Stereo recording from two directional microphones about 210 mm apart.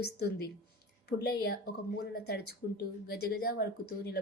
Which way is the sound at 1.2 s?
45° left (ahead or behind).